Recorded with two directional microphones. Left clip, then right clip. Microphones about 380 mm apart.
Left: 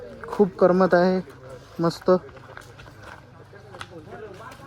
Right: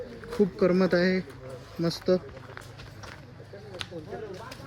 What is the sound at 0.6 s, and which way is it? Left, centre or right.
Speech, centre.